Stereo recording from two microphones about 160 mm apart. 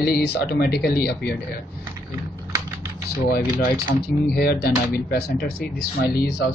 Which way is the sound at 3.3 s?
70° left (ahead or behind).